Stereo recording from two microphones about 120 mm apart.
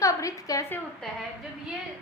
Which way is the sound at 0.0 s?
25° left (ahead or behind).